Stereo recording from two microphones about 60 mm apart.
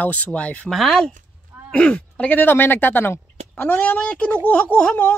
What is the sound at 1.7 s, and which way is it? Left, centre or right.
A woman's voice, centre.